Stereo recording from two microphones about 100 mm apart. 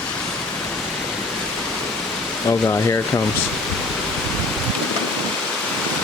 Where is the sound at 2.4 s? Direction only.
30° left (ahead or behind).